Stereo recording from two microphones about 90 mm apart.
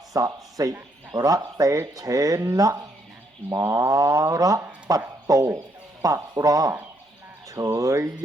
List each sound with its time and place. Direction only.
0.1 s speech: 40° right (ahead or behind)